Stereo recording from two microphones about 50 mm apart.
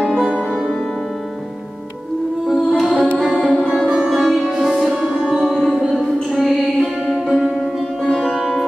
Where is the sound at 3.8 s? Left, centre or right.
Centre.